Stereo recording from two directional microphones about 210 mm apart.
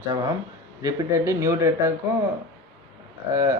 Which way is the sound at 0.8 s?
15° right (ahead or behind).